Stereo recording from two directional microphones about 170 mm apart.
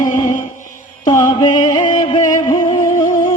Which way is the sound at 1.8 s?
50° left (ahead or behind).